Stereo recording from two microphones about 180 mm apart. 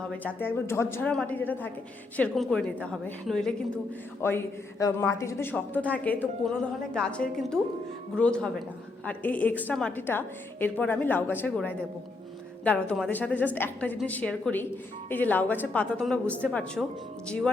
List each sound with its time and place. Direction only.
0.2 s a woman's voice: 10° left (ahead or behind)